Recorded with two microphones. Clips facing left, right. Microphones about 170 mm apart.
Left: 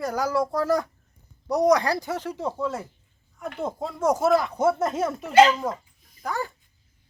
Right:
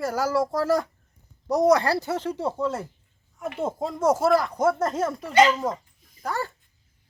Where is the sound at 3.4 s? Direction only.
5° right (ahead or behind).